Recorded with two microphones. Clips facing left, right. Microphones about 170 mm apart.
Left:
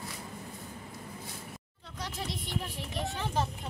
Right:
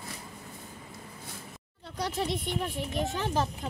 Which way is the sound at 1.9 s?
40° right (ahead or behind).